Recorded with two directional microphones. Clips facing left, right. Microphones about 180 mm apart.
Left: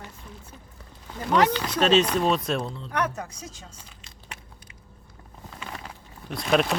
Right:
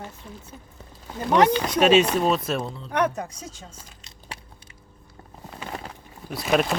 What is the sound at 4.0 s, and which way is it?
Biting, 30° right (ahead or behind).